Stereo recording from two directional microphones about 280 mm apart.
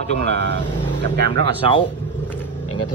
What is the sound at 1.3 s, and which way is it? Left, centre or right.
Speech, centre.